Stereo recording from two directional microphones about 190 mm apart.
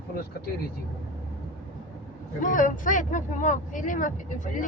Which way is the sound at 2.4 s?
45° left (ahead or behind).